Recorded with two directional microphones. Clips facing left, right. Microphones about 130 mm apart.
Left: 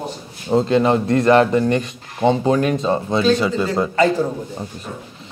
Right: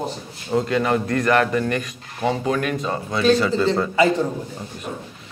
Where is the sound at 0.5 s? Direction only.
25° left (ahead or behind).